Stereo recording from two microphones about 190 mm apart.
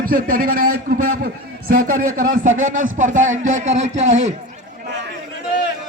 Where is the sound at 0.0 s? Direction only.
50° right (ahead or behind).